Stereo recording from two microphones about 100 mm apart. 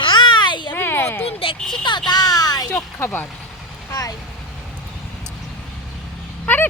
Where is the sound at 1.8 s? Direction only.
50° left (ahead or behind).